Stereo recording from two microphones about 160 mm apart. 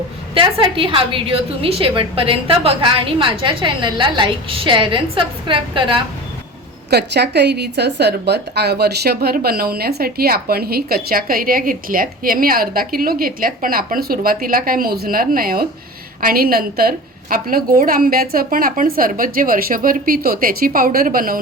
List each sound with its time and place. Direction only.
0.3 s a woman's voice: 30° right (ahead or behind)
6.9 s a woman's voice: 90° right; by 21.3 s 65° right (ahead or behind)